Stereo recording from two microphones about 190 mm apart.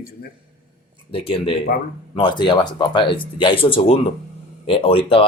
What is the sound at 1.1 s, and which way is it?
Speech, 30° left (ahead or behind).